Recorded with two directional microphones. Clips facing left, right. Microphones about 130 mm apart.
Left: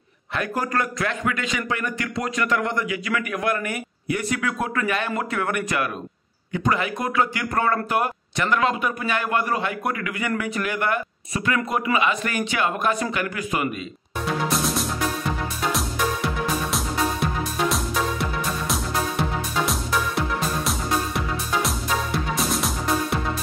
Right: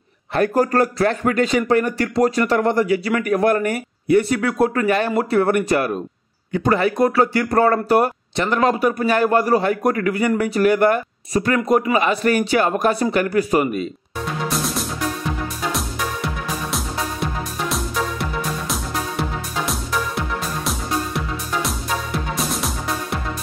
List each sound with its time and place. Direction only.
0.3 s speech: 40° right (ahead or behind)
14.5 s music: centre (ahead or behind)
16.7 s music: centre (ahead or behind)